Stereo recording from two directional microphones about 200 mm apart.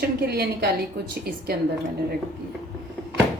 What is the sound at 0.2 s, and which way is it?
Speech, 50° right (ahead or behind).